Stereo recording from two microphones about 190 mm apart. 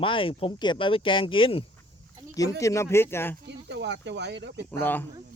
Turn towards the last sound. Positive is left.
turn(degrees=10)  # may be behind; listen again after turning